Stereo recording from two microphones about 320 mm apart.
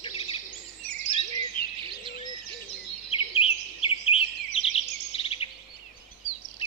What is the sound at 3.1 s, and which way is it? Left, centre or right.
Bird vocalization, centre.